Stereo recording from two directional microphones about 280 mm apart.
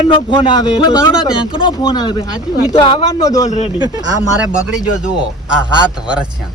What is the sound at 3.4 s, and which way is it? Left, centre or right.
Speech, left.